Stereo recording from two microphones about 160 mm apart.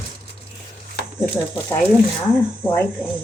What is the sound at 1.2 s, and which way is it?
Speech, 5° left (ahead or behind).